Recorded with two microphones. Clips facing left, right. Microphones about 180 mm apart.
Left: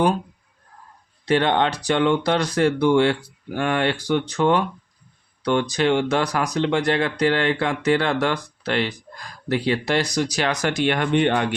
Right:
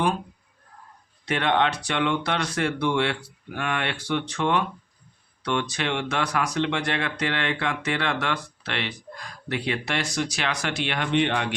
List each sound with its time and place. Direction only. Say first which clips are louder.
1.2 s speech: left 4 dB; 35° left (ahead or behind)